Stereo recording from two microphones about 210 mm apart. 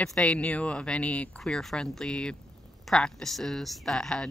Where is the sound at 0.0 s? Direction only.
5° left (ahead or behind).